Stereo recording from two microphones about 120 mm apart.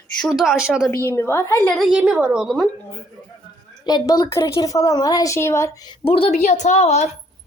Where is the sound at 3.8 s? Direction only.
35° left (ahead or behind).